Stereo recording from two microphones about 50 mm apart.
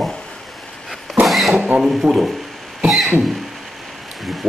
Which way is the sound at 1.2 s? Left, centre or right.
Centre.